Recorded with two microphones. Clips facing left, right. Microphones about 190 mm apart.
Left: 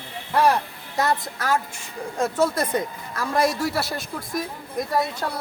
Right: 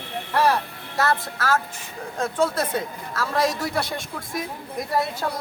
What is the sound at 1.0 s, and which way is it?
Speech, 15° left (ahead or behind).